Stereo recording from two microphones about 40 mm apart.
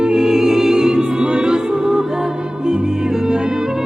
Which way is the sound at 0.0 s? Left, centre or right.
Centre.